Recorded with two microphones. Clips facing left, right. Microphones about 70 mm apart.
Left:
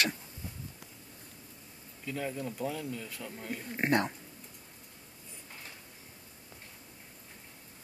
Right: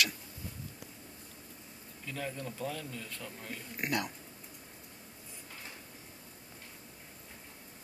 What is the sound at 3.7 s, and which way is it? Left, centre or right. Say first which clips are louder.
Speech: left 6 dB; left.